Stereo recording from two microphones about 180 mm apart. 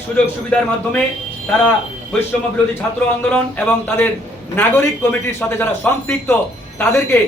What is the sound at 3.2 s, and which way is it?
A man's voice, 5° left (ahead or behind).